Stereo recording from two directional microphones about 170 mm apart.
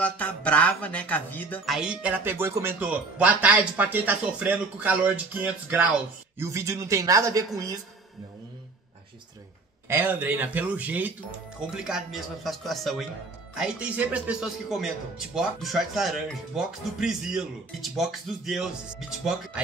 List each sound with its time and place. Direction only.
0.0 s speech: 10° left (ahead or behind)
1.7 s a man's voice: 5° right (ahead or behind); by 7.8 s 20° right (ahead or behind)
9.8 s a man's voice: 10° right (ahead or behind)